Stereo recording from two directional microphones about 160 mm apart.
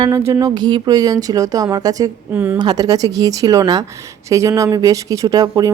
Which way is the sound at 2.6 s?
25° right (ahead or behind).